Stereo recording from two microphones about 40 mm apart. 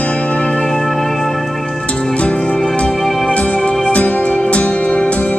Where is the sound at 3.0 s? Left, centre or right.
Centre.